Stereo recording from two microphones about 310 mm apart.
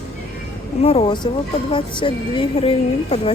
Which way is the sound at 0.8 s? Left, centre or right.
Centre.